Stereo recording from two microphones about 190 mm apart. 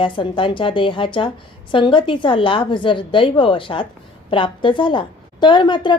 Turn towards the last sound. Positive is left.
turn(degrees=25)  # may be behind; listen again after turning